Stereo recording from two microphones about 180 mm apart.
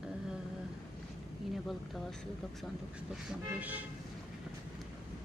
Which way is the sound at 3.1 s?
5° right (ahead or behind).